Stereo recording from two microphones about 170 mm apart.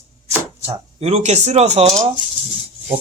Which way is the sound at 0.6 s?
35° right (ahead or behind).